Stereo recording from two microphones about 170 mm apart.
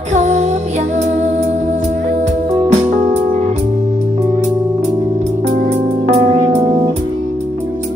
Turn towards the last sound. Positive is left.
turn(degrees=-40)  # may be behind; listen again after turning